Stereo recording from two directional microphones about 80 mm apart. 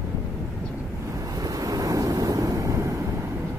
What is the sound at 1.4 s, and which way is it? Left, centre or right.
Wind noise, right.